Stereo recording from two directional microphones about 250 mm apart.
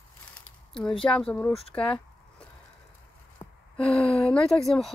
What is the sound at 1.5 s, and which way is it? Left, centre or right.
Speech, left.